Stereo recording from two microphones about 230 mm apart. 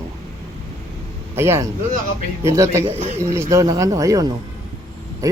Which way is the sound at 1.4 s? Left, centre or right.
Centre.